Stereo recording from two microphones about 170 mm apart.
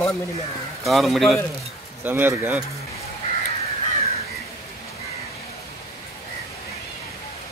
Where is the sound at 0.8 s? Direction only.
Centre (ahead or behind).